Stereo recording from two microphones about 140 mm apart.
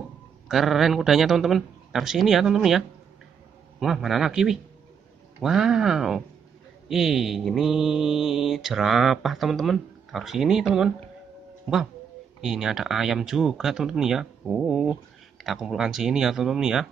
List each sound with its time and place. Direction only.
0.5 s speech: centre (ahead or behind)
3.8 s speech: centre (ahead or behind)
12.4 s speech: 5° right (ahead or behind)